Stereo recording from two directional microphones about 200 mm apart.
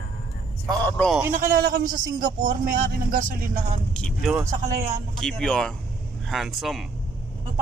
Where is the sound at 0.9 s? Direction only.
5° left (ahead or behind).